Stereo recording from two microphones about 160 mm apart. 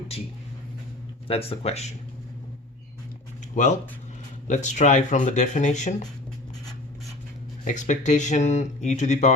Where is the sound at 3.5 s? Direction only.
45° left (ahead or behind).